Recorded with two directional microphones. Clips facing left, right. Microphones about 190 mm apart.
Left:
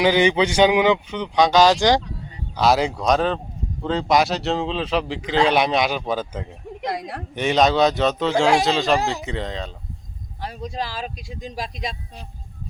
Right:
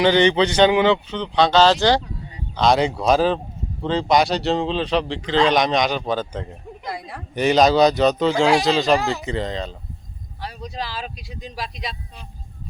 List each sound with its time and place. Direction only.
0.0 s a man's voice: 10° left (ahead or behind)
6.8 s speech: 75° left (ahead or behind)
7.3 s a man's voice: centre (ahead or behind)
10.4 s speech: 45° left (ahead or behind)